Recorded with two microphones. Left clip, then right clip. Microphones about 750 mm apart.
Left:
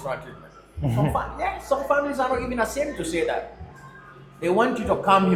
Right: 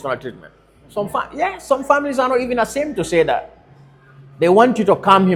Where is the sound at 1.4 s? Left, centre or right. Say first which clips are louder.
Right 8 dB; right.